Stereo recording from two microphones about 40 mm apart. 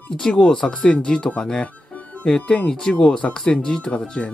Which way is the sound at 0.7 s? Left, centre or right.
Left.